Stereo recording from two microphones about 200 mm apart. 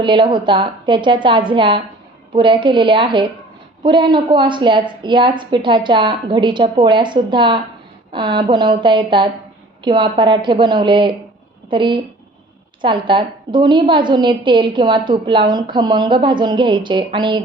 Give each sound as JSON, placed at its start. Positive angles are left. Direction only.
{"t": 0.0, "sound": "a woman's voice", "side_deg": -25}